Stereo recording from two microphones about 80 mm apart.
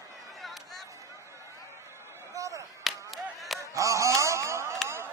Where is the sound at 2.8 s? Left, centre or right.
Centre.